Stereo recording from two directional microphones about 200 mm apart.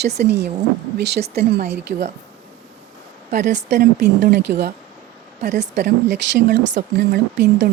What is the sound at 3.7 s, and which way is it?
Speech, 55° right (ahead or behind).